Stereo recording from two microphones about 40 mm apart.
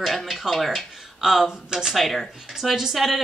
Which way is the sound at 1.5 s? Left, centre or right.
Centre.